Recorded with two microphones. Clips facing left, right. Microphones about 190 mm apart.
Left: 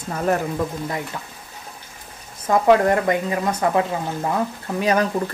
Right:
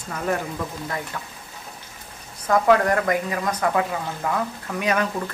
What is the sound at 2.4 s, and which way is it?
Speech, 25° left (ahead or behind).